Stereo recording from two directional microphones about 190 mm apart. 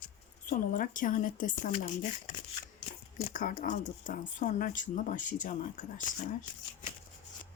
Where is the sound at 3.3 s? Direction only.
45° left (ahead or behind).